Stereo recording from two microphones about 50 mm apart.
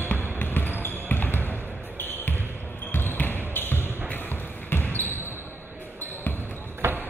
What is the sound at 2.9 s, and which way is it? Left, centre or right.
Basketball bounce, left.